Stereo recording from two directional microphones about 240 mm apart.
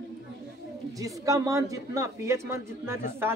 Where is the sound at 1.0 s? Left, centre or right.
Centre.